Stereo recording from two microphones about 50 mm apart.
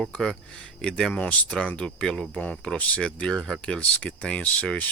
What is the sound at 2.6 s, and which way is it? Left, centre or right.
Speech, left.